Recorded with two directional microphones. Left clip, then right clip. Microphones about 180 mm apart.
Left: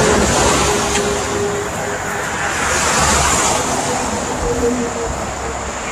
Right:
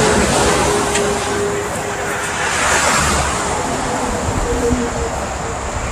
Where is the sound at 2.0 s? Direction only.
60° right (ahead or behind).